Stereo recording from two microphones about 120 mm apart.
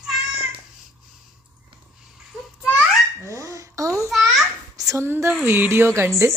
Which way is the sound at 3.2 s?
25° right (ahead or behind).